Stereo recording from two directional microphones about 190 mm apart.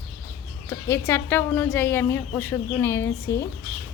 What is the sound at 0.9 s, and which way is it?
A woman's voice, 15° left (ahead or behind).